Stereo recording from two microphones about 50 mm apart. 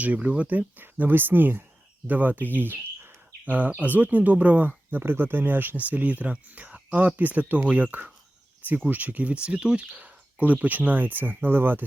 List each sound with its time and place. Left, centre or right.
0.0 s speech: right
2.6 s bird: right
3.7 s speech: right
4.9 s speech: right